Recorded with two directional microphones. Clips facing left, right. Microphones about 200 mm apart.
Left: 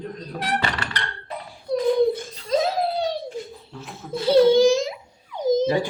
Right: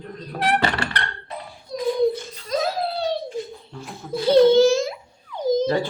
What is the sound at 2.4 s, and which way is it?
Laughter, 25° left (ahead or behind).